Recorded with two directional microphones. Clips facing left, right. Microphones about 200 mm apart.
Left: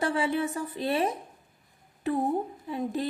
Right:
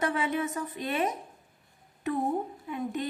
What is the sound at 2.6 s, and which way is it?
Speech, 30° left (ahead or behind).